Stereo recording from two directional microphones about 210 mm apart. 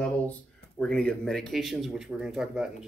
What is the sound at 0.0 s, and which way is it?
Speech, 5° left (ahead or behind).